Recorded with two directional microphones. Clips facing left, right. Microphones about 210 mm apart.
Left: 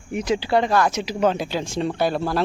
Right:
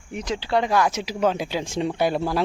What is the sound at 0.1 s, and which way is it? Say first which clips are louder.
Speech: left 4 dB; 5° left (ahead or behind).